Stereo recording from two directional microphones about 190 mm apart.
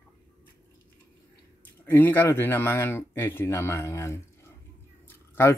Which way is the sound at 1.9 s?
10° left (ahead or behind).